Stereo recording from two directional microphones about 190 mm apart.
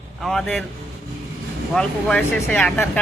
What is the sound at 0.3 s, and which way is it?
Speech, centre (ahead or behind).